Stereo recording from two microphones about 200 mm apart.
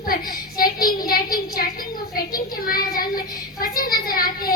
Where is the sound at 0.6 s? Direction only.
45° left (ahead or behind).